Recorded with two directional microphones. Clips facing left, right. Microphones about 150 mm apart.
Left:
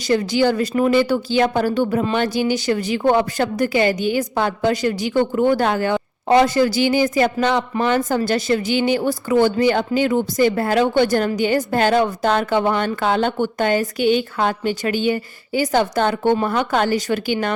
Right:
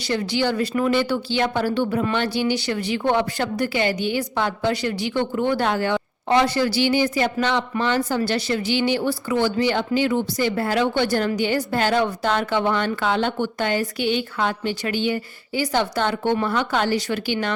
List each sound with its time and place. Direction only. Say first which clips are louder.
0.1 s a woman's voice: left 5 dB; 45° left (ahead or behind)